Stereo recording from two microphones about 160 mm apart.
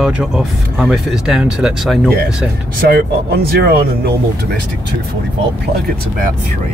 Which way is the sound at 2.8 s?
90° right.